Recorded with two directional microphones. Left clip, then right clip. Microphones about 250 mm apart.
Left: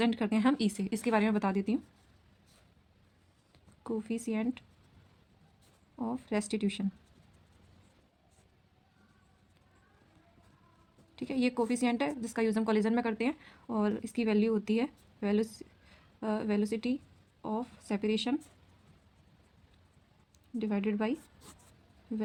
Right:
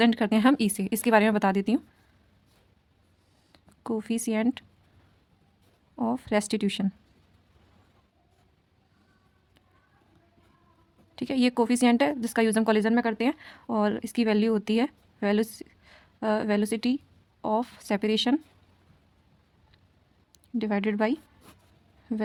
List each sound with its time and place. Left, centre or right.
0.0 s speech: right
3.5 s speech: right
6.0 s speech: right
11.1 s speech: right
20.6 s speech: right